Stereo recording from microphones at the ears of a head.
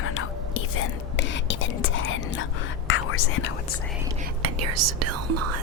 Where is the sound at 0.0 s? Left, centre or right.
Left.